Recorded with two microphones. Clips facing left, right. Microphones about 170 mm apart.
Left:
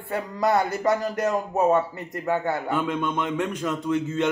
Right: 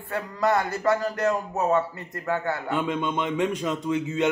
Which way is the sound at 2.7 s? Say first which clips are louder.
Left 1 dB; 10° right (ahead or behind).